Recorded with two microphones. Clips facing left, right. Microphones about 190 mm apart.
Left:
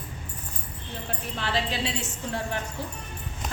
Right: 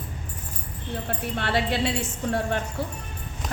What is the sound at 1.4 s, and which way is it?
Speech, 60° right (ahead or behind).